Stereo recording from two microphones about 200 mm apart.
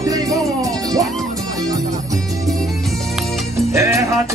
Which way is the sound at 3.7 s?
15° right (ahead or behind).